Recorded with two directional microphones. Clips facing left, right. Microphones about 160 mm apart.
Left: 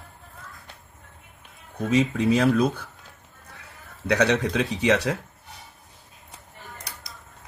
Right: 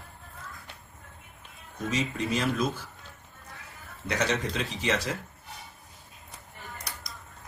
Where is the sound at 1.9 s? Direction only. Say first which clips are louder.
Left 9 dB; 65° left (ahead or behind).